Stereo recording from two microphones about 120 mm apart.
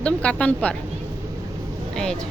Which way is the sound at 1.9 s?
5° left (ahead or behind).